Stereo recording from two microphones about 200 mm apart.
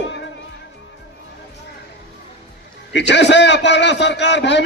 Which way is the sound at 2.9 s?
60° left (ahead or behind).